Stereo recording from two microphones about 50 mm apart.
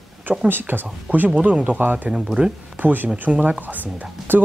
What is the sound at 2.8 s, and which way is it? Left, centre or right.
Speech, right.